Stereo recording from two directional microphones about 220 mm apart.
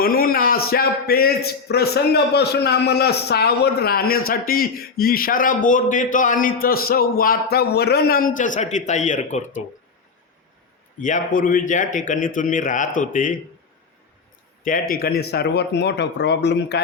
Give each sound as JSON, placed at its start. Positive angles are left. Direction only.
{"t": 0.0, "sound": "a man's voice", "side_deg": 40}
{"t": 11.0, "sound": "speech", "side_deg": 35}
{"t": 14.6, "sound": "a man's voice", "side_deg": 40}